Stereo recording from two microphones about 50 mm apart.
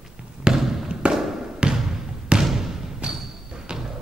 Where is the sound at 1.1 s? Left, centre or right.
Centre.